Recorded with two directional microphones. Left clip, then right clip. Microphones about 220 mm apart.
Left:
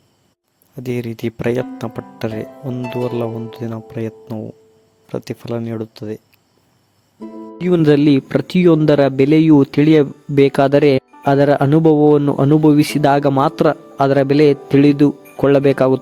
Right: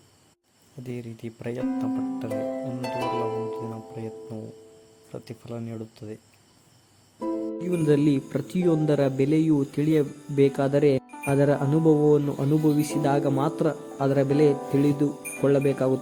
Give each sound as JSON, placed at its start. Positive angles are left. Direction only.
{"t": 0.8, "sound": "speech", "side_deg": 45}
{"t": 3.5, "sound": "speech", "side_deg": 40}
{"t": 7.6, "sound": "speech", "side_deg": 40}